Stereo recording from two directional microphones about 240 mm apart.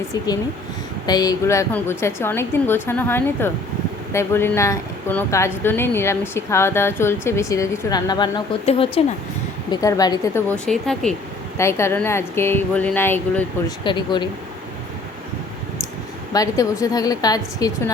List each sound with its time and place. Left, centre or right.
1.0 s a woman's voice: centre
10.5 s a woman's voice: centre
16.3 s a woman's voice: centre